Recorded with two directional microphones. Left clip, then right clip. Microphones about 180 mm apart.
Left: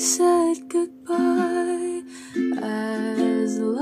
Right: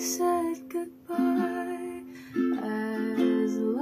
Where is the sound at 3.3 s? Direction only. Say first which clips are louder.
Left 4 dB; 50° left (ahead or behind).